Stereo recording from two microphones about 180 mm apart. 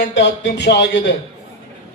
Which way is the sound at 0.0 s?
75° left (ahead or behind).